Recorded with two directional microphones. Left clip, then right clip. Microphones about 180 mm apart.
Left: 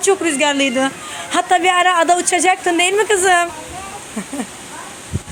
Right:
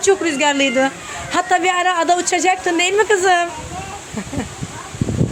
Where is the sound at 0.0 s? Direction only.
Centre (ahead or behind).